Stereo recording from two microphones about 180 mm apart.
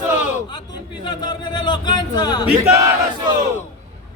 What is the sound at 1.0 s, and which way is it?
A man's voice, 25° left (ahead or behind).